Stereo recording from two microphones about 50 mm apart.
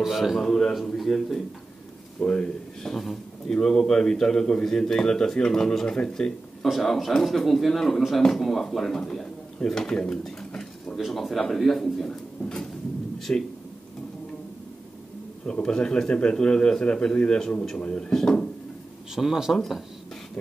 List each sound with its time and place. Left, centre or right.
0.0 s speech: centre
0.5 s a man's voice: centre
2.1 s a man's voice: left
9.6 s pigeon: centre
11.0 s speech: centre
13.3 s speech: left
15.6 s speech: centre
18.1 s a man's voice: centre
19.1 s speech: centre